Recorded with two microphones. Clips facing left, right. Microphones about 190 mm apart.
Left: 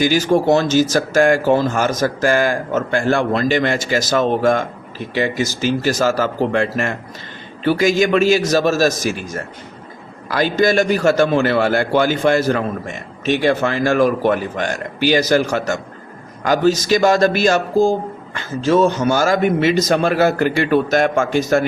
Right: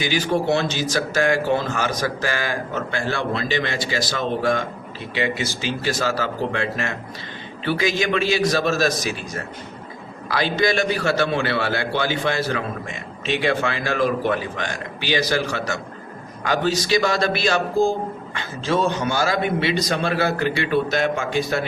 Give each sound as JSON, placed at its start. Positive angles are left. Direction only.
{"t": 0.0, "sound": "speech", "side_deg": 45}